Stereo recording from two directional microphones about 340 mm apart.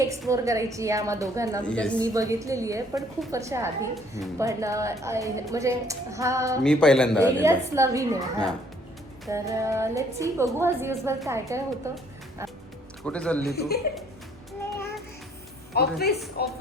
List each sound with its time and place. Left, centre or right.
0.0 s a woman's voice: centre
1.6 s speech: centre
2.0 s a woman's voice: centre
6.6 s speech: centre
7.4 s a woman's voice: centre
13.1 s speech: centre
13.5 s a woman's voice: left
15.7 s a woman's voice: left